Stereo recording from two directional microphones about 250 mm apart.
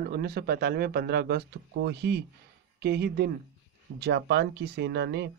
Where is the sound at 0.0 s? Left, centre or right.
Right.